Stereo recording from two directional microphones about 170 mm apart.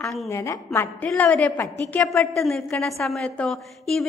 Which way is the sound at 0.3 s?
15° left (ahead or behind).